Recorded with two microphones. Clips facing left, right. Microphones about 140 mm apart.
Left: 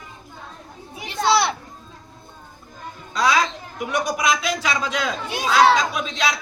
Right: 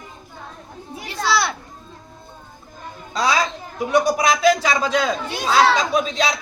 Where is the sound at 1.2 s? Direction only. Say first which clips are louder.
Left 2 dB; 20° left (ahead or behind).